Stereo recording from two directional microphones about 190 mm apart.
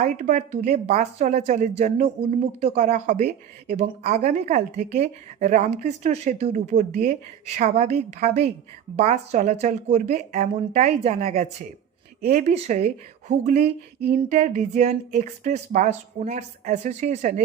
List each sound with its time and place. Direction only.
0.0 s speech: 40° right (ahead or behind)